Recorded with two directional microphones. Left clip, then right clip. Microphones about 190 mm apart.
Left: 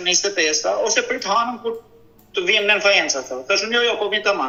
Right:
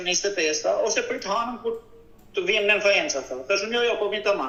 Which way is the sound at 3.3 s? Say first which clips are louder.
Left 4 dB; 15° left (ahead or behind).